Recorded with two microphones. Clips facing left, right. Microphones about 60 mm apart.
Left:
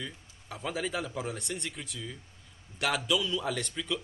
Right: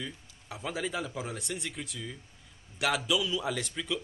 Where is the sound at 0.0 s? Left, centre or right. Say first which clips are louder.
Right 1 dB; centre.